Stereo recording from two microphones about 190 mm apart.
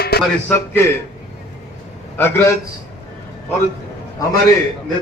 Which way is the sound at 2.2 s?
10° left (ahead or behind).